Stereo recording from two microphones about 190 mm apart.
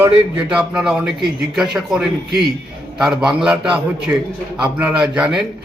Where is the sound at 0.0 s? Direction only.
5° right (ahead or behind).